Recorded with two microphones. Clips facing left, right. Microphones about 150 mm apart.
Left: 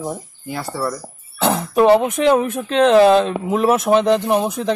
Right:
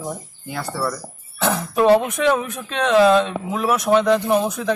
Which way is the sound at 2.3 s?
30° left (ahead or behind).